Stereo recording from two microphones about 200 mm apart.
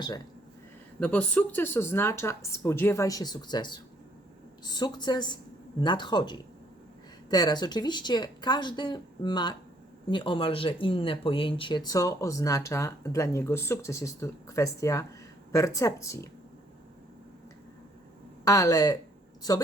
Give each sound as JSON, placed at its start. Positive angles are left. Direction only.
{"t": 0.9, "sound": "speech", "side_deg": 5}
{"t": 18.4, "sound": "a woman's voice", "side_deg": 15}